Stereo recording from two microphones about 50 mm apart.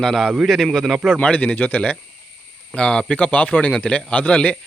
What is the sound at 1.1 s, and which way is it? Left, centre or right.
Speech, left.